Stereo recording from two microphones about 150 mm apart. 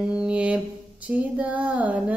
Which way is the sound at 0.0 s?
5° right (ahead or behind).